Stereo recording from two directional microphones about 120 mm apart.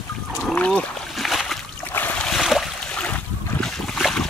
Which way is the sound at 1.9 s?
15° left (ahead or behind).